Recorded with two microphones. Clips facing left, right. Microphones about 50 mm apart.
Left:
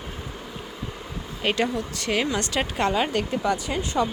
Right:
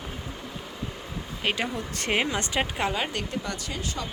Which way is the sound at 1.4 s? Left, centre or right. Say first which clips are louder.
Left 4 dB; centre.